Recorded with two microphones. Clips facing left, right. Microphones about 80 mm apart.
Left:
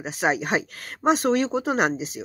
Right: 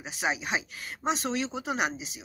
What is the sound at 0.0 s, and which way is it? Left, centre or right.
A woman's voice, left.